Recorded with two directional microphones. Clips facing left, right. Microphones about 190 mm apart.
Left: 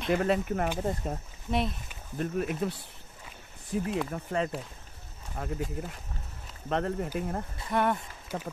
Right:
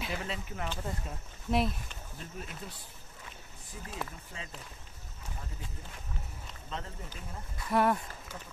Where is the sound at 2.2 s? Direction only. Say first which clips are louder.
Left 15 dB; 60° left (ahead or behind).